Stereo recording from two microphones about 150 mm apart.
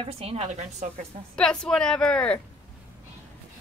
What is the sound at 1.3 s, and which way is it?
A woman's voice, 5° left (ahead or behind).